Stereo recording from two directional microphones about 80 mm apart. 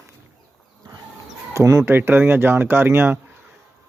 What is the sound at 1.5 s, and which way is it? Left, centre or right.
Speech, right.